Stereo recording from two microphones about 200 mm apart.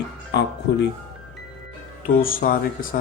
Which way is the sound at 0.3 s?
60° left (ahead or behind).